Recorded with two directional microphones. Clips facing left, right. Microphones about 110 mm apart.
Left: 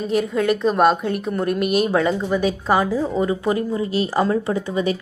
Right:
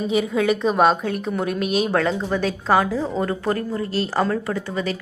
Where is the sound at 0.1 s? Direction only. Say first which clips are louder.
Left 1 dB; centre (ahead or behind).